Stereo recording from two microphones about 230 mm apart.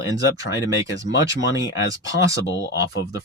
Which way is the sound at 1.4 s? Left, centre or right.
Left.